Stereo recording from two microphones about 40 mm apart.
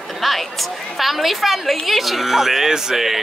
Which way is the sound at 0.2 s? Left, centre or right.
Centre.